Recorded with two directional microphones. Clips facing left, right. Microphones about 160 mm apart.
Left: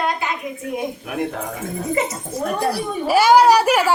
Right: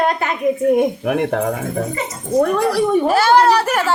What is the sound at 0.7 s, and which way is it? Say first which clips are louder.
Speech: right 9 dB; 70° right (ahead or behind).